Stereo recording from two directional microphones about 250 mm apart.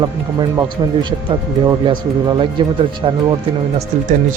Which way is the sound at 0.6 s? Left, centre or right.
Centre.